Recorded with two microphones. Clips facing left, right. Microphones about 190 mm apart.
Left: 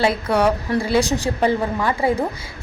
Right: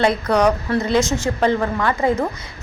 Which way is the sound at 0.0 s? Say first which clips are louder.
Right 1 dB; 5° left (ahead or behind).